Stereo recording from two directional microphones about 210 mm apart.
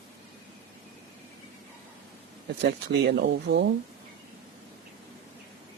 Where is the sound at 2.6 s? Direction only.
50° right (ahead or behind).